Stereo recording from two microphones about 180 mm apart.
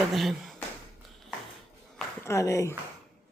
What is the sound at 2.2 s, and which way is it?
Speech, 15° left (ahead or behind).